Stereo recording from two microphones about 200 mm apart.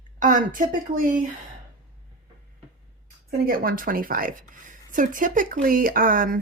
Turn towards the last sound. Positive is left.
turn(degrees=-45)  # may be behind; listen again after turning